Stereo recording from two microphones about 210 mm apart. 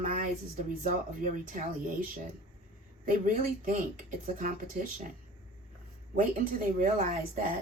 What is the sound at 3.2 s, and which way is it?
Speech, 40° right (ahead or behind).